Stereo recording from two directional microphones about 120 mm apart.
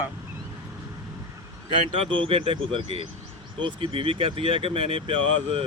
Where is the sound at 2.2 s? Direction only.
50° right (ahead or behind).